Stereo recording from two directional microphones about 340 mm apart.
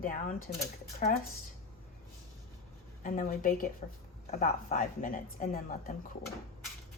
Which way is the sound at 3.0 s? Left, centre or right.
Left.